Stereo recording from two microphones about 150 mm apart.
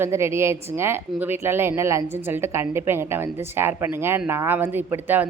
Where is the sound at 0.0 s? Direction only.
15° right (ahead or behind).